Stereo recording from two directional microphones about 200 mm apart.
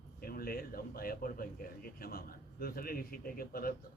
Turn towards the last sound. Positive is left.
turn(degrees=45)  # may be behind; listen again after turning